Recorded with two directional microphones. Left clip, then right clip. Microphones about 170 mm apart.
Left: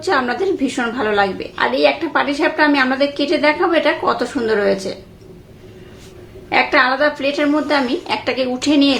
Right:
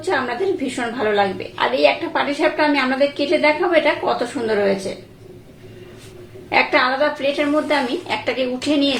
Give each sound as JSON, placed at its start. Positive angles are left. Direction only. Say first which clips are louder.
{"t": 0.0, "sound": "a woman's voice", "louder": "left 3 dB", "side_deg": 30}
{"t": 6.5, "sound": "a woman's voice", "louder": "left 2 dB", "side_deg": 15}